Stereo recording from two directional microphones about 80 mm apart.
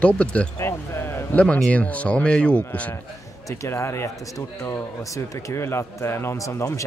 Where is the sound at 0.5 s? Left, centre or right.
Left.